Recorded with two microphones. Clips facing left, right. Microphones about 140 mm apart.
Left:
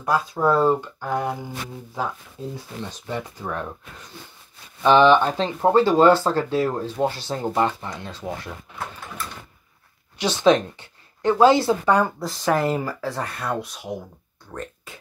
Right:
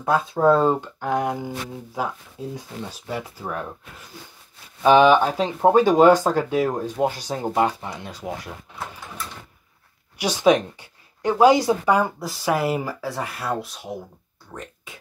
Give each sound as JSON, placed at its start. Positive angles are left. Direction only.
{"t": 0.0, "sound": "speech", "side_deg": -25}
{"t": 2.5, "sound": "speech", "side_deg": -10}
{"t": 4.8, "sound": "speech", "side_deg": -10}
{"t": 10.1, "sound": "speech", "side_deg": -10}